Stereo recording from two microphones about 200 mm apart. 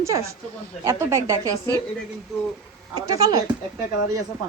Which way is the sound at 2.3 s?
Centre (ahead or behind).